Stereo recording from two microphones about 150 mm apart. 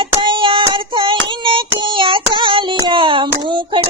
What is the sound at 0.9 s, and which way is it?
Child singing, 35° right (ahead or behind).